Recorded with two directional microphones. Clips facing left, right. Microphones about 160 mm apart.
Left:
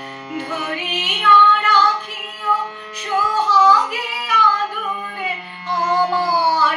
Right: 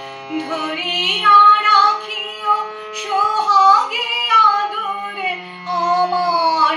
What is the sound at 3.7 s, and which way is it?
Yodeling, 15° right (ahead or behind).